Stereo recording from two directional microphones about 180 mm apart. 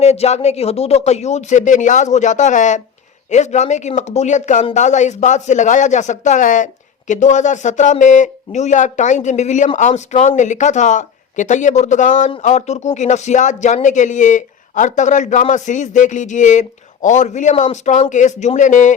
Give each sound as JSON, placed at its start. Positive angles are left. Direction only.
{"t": 0.0, "sound": "speech", "side_deg": 35}